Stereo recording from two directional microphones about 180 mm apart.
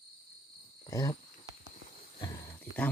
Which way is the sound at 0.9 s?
20° left (ahead or behind).